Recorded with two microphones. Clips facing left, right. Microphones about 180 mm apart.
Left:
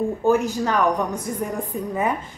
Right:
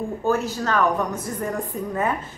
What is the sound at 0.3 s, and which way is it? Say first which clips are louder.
Speech: left 3 dB; 15° left (ahead or behind).